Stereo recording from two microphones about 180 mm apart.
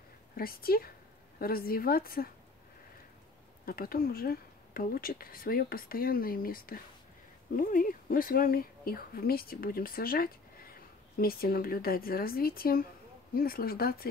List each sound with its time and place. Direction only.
0.4 s speech: 55° left (ahead or behind)
3.6 s speech: 55° left (ahead or behind)